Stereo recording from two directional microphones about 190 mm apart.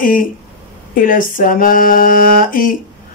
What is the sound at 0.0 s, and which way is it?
Speech, 45° left (ahead or behind).